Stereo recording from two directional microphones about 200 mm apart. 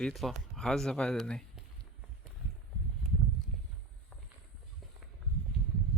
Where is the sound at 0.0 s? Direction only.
Centre (ahead or behind).